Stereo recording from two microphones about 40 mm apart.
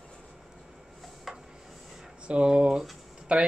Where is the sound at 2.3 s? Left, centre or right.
Right.